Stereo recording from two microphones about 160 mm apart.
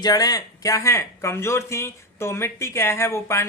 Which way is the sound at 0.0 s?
25° left (ahead or behind).